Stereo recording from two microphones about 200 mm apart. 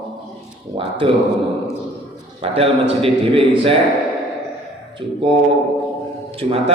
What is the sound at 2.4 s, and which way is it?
A man's voice, 30° right (ahead or behind).